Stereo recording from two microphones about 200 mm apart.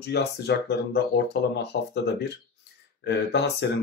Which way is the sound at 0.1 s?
55° left (ahead or behind).